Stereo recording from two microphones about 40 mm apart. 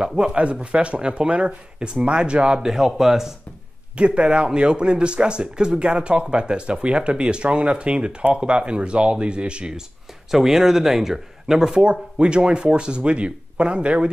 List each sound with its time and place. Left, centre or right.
0.0 s speech: centre
0.4 s speech: right
2.6 s speech: centre
3.9 s speech: right
10.3 s speech: centre; by 14.1 s right